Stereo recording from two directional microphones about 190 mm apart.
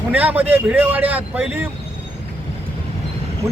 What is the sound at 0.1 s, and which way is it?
Speech, 10° right (ahead or behind).